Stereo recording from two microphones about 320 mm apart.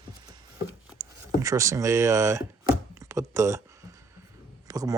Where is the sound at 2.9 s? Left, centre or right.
Centre.